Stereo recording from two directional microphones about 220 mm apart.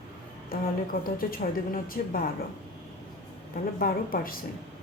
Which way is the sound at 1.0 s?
40° left (ahead or behind).